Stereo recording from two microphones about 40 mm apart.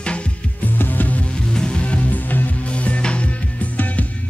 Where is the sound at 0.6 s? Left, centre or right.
Left.